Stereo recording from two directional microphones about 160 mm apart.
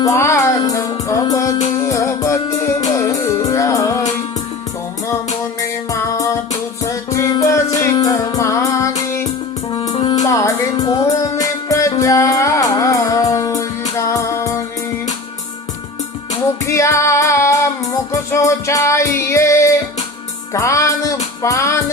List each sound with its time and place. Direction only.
0.0 s music: 20° left (ahead or behind)
5.5 s music: 20° left (ahead or behind)
9.9 s music: 25° left (ahead or behind)
16.6 s music: 20° left (ahead or behind)